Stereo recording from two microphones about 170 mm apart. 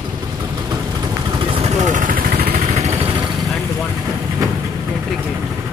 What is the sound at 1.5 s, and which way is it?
Vehicle, 40° right (ahead or behind).